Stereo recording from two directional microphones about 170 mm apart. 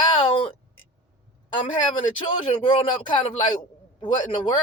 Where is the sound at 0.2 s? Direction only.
30° left (ahead or behind).